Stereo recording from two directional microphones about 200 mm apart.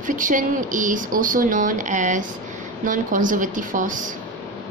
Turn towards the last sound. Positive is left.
turn(degrees=-40)  # may be behind; listen again after turning